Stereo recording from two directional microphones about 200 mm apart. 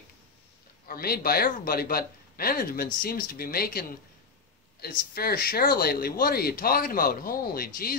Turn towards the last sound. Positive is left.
turn(degrees=45)  # may be behind; listen again after turning